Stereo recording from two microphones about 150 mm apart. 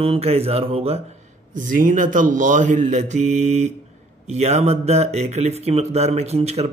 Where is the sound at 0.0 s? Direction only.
40° right (ahead or behind).